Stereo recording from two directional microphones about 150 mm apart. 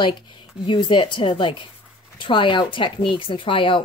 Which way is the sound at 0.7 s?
30° left (ahead or behind).